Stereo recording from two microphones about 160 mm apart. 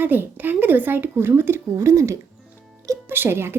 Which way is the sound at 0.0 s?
10° right (ahead or behind).